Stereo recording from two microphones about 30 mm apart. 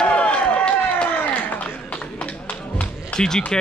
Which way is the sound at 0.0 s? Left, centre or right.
Left.